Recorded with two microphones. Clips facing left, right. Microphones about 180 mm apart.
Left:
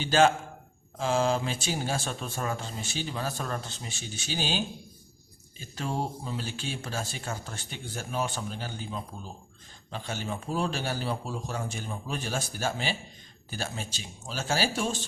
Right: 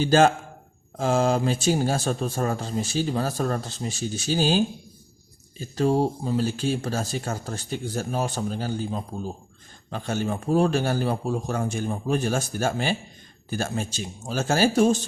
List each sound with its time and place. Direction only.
0.0 s speech: 45° right (ahead or behind)